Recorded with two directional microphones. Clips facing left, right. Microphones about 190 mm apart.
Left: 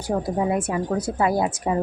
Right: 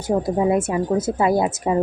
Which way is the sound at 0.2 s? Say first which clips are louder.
Right 5 dB; 25° right (ahead or behind).